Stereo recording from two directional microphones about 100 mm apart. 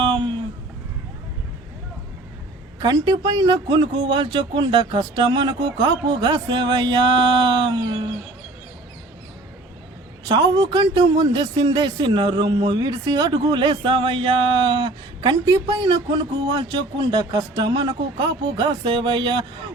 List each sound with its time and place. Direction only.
0.0 s a sound: 55° right (ahead or behind)
2.8 s speech: 45° right (ahead or behind)
10.2 s speech: 50° right (ahead or behind)